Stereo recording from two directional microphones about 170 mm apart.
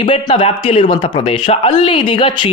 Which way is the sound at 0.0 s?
30° left (ahead or behind).